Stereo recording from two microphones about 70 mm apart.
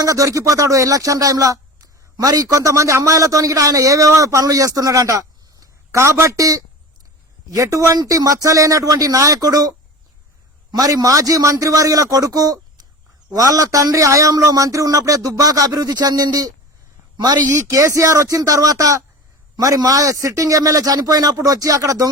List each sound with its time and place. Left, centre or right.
0.0 s a man's voice: right
17.2 s speech: right
17.5 s a man's voice: right